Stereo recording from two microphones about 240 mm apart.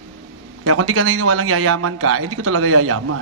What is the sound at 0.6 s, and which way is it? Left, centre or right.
A man's voice, right.